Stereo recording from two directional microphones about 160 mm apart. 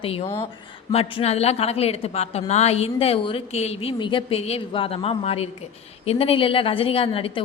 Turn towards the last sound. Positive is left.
turn(degrees=35)  # may be behind; listen again after turning